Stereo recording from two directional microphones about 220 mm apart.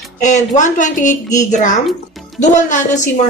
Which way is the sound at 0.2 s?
35° left (ahead or behind).